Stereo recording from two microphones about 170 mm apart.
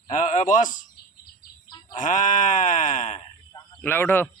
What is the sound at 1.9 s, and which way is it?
A man's voice, 50° left (ahead or behind).